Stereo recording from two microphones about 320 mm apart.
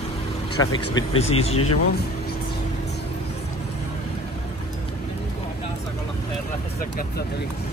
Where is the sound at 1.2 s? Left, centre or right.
Centre.